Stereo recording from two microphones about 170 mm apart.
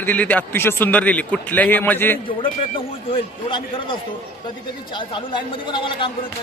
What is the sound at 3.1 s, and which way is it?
A man's voice, 30° left (ahead or behind).